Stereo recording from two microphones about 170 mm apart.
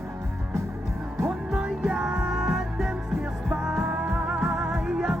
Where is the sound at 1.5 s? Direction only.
Centre (ahead or behind).